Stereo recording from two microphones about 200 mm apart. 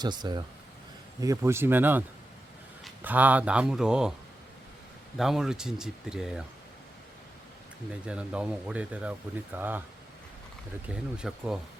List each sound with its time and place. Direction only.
0.0 s speech: 20° right (ahead or behind); by 4.1 s 5° right (ahead or behind)
5.1 s speech: centre (ahead or behind)
8.0 s speech: 5° right (ahead or behind)
10.8 s speech: 5° right (ahead or behind)